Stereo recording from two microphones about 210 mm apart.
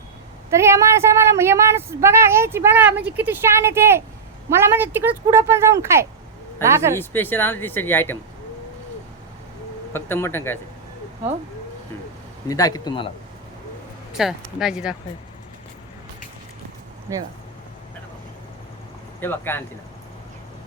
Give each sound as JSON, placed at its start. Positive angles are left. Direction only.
{"t": 0.5, "sound": "speech", "side_deg": -15}
{"t": 6.9, "sound": "speech", "side_deg": 10}
{"t": 9.9, "sound": "speech", "side_deg": 10}
{"t": 12.5, "sound": "speech", "side_deg": 15}
{"t": 14.1, "sound": "speech", "side_deg": 0}
{"t": 17.1, "sound": "speech", "side_deg": -15}
{"t": 19.2, "sound": "speech", "side_deg": 10}